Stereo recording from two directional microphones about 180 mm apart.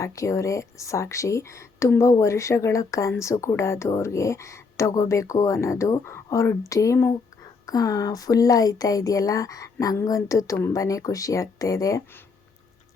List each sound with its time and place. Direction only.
0.0 s a woman's voice: 15° left (ahead or behind)